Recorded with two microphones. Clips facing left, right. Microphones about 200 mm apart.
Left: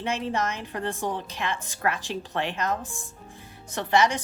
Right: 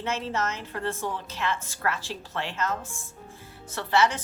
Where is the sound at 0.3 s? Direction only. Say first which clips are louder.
Left 2 dB; 15° left (ahead or behind).